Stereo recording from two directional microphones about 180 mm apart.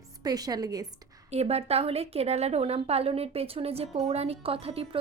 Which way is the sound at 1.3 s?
35° right (ahead or behind).